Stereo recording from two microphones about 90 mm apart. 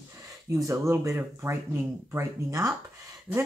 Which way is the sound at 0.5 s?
35° right (ahead or behind).